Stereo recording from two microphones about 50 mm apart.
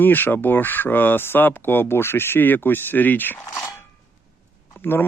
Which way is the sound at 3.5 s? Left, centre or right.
Left.